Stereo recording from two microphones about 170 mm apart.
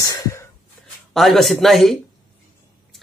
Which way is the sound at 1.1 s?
Centre (ahead or behind).